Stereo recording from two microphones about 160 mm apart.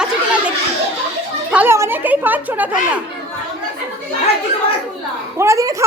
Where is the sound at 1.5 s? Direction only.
15° right (ahead or behind).